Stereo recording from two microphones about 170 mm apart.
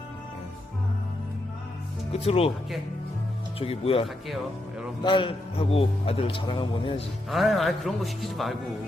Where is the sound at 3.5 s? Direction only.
35° left (ahead or behind).